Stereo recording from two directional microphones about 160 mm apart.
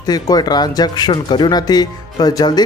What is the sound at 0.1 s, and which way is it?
Speech, 25° left (ahead or behind).